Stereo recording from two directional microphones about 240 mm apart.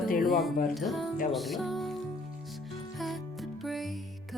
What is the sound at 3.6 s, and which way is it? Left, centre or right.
Music, centre.